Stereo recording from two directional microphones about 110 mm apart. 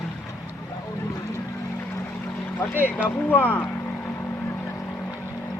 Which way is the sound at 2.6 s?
15° left (ahead or behind).